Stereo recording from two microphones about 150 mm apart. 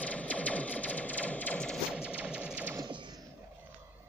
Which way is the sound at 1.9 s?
5° right (ahead or behind).